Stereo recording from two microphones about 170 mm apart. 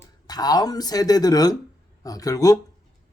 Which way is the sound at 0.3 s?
20° left (ahead or behind).